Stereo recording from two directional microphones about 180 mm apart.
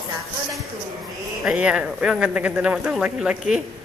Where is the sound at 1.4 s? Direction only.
5° right (ahead or behind).